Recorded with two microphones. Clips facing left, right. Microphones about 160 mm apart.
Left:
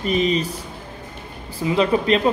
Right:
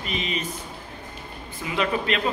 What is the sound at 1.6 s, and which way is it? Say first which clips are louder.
Speech: left 7 dB; 30° left (ahead or behind).